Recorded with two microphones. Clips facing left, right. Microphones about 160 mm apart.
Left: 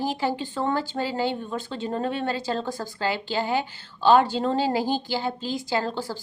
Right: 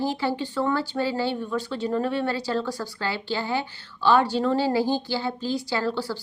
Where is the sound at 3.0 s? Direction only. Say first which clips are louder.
Left 4 dB; 15° left (ahead or behind).